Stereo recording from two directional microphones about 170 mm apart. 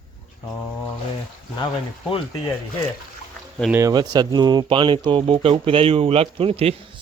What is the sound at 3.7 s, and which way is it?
Speech, 20° right (ahead or behind).